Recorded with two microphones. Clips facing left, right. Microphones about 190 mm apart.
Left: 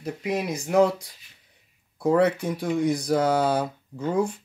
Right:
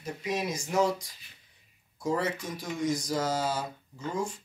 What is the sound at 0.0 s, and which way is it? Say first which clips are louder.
Speech: left 5 dB; 60° left (ahead or behind).